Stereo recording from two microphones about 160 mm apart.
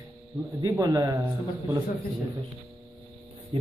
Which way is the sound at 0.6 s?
25° right (ahead or behind).